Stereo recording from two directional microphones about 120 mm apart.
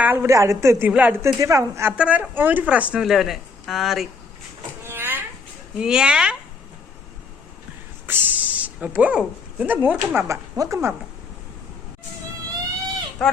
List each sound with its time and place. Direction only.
0.0 s a woman's voice: 15° right (ahead or behind)
0.9 s speech: 15° right (ahead or behind)
1.2 s a woman's voice: 25° right (ahead or behind)
2.0 s speech: 10° right (ahead or behind)
4.9 s a sound: 15° right (ahead or behind)
5.8 s speech: 5° right (ahead or behind)
8.0 s speech: 15° right (ahead or behind)
10.2 s a woman's voice: 25° right (ahead or behind)
13.2 s speech: 5° left (ahead or behind)